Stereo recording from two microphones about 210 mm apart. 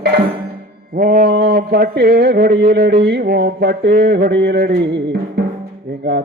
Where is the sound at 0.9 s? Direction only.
45° right (ahead or behind).